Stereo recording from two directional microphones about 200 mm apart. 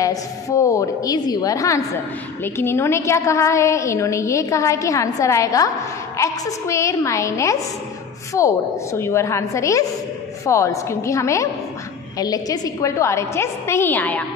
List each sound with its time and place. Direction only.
0.0 s a woman's voice: 15° left (ahead or behind)